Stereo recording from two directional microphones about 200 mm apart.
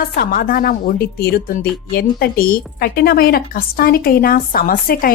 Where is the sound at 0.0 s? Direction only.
45° left (ahead or behind).